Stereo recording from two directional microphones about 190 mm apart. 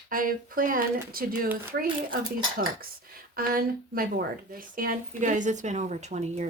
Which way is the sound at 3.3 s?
50° right (ahead or behind).